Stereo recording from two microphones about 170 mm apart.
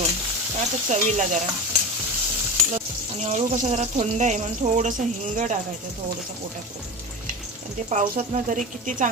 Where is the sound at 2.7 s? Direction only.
40° right (ahead or behind).